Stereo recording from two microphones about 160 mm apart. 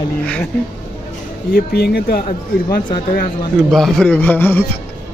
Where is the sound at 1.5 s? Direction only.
75° left (ahead or behind).